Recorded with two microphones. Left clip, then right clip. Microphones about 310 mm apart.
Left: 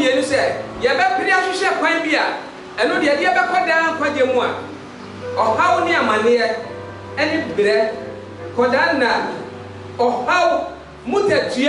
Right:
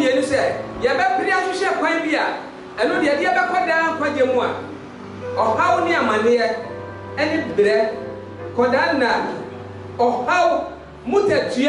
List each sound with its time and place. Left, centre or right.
0.0 s a sound: centre
2.8 s a man's voice: centre
9.9 s speech: centre
10.2 s a man's voice: centre